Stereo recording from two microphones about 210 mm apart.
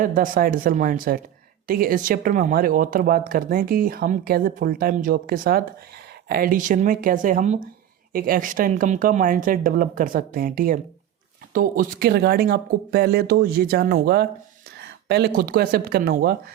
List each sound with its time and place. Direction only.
0.0 s speech: 40° right (ahead or behind)